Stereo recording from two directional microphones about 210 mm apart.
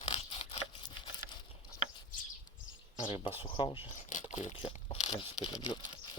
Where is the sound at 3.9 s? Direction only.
35° left (ahead or behind).